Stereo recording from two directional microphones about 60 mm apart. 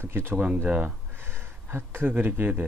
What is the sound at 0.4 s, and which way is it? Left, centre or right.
Speech, right.